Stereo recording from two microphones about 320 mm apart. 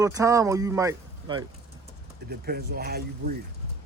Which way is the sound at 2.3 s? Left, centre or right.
Right.